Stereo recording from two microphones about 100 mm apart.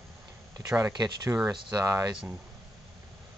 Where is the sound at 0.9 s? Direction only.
45° right (ahead or behind).